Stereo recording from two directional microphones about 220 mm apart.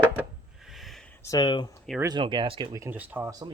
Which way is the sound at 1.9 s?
20° right (ahead or behind).